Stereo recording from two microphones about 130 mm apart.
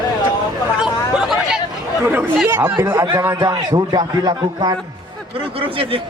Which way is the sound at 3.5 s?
30° right (ahead or behind).